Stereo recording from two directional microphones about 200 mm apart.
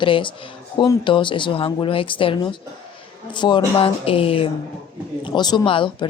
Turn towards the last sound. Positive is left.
turn(degrees=25)  # may be behind; listen again after turning